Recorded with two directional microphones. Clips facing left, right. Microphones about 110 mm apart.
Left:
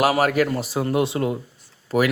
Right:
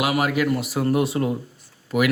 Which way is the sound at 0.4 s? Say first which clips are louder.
Right 2 dB; 30° left (ahead or behind).